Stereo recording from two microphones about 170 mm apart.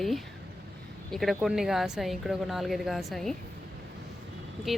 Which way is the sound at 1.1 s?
Centre (ahead or behind).